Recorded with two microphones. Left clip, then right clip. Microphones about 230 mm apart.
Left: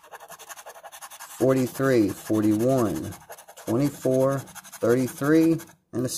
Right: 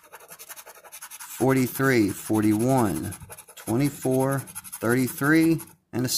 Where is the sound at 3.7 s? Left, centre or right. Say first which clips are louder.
Left 1 dB; centre.